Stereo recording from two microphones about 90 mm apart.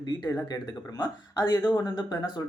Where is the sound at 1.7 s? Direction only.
50° left (ahead or behind).